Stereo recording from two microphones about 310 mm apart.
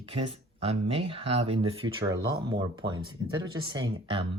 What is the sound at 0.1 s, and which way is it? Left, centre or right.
Speech, centre.